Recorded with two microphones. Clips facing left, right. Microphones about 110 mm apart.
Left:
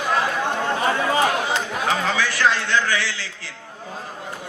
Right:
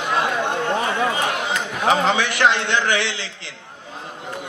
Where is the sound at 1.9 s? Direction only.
20° right (ahead or behind).